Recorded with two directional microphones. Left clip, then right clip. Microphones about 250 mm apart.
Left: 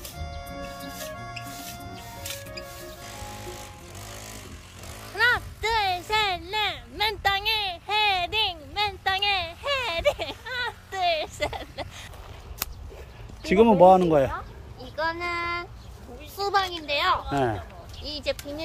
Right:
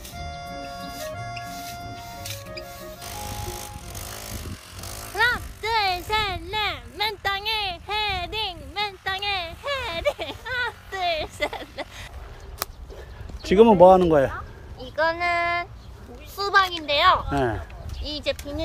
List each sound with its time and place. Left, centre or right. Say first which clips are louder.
0.2 s music: right 4 dB; centre
1.5 s music: right 4 dB; centre
3.4 s music: right 4 dB; centre
5.1 s a sound: even; centre
13.4 s speech: right 3 dB; centre
14.8 s a sound: right 5 dB; centre
18.0 s speech: right 2 dB; centre